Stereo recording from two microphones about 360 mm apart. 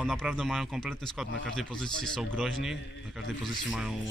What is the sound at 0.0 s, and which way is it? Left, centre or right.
Speech, centre.